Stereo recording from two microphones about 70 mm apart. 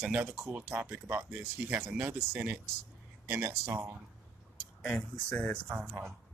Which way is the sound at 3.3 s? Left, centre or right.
Right.